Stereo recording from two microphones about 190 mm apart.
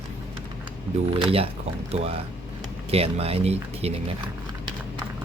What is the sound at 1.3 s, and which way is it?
Speech, 30° right (ahead or behind).